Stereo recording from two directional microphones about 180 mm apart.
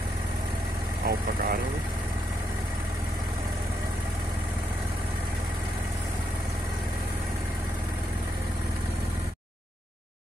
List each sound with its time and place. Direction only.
1.0 s speech: 55° right (ahead or behind)